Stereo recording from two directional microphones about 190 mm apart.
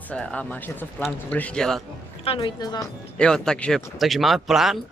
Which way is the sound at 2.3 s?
30° left (ahead or behind).